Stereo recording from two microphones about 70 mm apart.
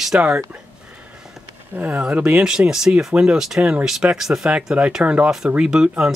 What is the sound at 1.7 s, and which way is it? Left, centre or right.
Speech, right.